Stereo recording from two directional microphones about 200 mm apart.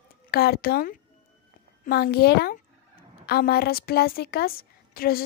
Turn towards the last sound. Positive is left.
turn(degrees=50)  # may be behind; listen again after turning